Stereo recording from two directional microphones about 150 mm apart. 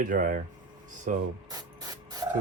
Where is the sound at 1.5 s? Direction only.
25° right (ahead or behind).